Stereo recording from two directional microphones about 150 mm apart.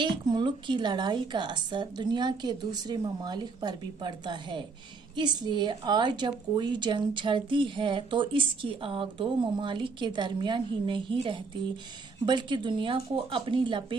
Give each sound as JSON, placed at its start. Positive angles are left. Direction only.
{"t": 0.0, "sound": "a woman's voice", "side_deg": -30}